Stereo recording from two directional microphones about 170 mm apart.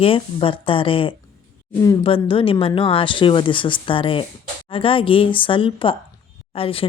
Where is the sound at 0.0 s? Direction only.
30° left (ahead or behind).